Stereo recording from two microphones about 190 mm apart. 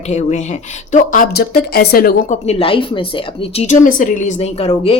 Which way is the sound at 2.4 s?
30° left (ahead or behind).